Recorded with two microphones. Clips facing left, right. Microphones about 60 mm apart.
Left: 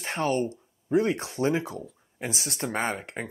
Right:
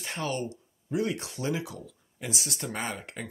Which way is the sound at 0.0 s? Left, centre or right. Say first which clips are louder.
Left 6 dB; left.